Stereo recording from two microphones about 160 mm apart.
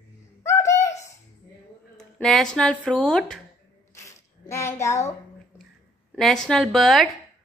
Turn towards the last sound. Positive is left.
turn(degrees=0)  # may be behind; listen again after turning